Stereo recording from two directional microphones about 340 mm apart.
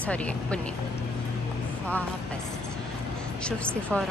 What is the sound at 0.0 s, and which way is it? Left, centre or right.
Speech, centre.